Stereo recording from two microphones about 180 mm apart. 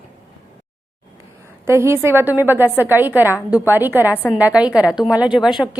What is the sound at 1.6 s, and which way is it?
A woman's voice, 15° right (ahead or behind).